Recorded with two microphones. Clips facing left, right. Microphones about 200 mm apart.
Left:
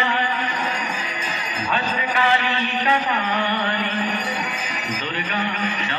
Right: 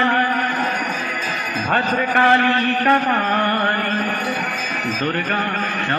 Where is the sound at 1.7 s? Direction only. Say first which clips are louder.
Right 5 dB; 55° right (ahead or behind).